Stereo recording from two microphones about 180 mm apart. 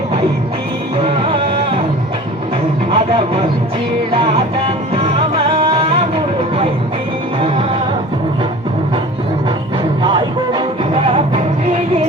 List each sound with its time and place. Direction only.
2.9 s a sound: 30° right (ahead or behind)
4.1 s music: 30° right (ahead or behind)
10.0 s music: 25° right (ahead or behind)